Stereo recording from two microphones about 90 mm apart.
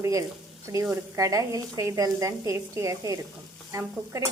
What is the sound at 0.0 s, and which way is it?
Frying, 35° right (ahead or behind).